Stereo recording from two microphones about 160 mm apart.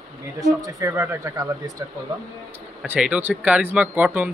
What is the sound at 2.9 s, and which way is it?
Speech, 10° right (ahead or behind).